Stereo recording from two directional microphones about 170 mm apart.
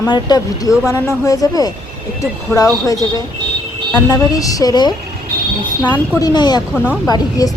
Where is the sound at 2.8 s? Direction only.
20° left (ahead or behind).